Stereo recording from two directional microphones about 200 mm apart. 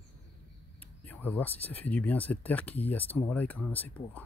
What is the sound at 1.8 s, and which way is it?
Speech, 10° left (ahead or behind).